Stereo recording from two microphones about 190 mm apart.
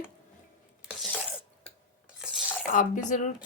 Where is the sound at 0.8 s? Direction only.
Centre (ahead or behind).